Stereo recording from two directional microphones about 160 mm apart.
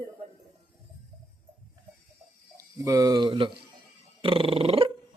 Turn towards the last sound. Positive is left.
turn(degrees=-35)  # may be behind; listen again after turning